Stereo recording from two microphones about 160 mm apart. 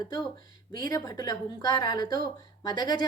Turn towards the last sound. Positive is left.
turn(degrees=25)  # may be behind; listen again after turning